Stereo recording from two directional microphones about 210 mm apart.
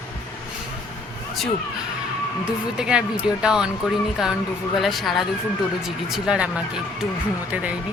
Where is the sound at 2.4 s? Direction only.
5° right (ahead or behind).